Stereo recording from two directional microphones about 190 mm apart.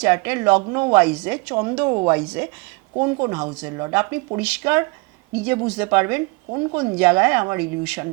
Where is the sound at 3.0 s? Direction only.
25° right (ahead or behind).